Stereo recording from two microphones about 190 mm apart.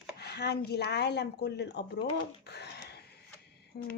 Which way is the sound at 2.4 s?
60° left (ahead or behind).